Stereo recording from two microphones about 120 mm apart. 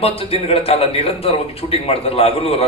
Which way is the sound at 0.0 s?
55° left (ahead or behind).